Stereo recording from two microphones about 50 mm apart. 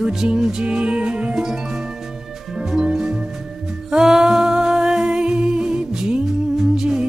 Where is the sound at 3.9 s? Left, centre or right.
Centre.